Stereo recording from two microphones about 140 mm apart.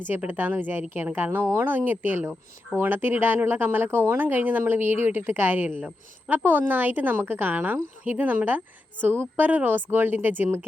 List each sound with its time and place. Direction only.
0.0 s speech: 15° right (ahead or behind)